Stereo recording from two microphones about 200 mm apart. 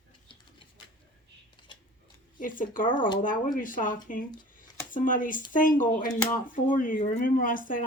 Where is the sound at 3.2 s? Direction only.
40° left (ahead or behind).